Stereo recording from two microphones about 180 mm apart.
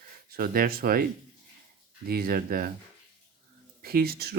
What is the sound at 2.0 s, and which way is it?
Speech, 55° right (ahead or behind).